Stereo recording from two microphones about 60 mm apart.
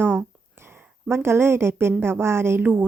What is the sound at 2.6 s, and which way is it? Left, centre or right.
Speech, right.